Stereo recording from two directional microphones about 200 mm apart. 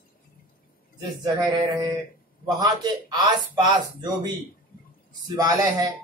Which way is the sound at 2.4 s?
20° right (ahead or behind).